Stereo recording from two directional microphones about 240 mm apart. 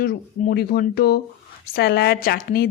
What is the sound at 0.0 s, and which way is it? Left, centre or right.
A woman's voice, left.